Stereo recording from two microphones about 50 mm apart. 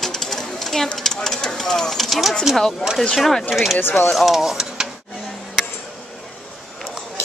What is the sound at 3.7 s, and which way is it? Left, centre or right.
Speech, left.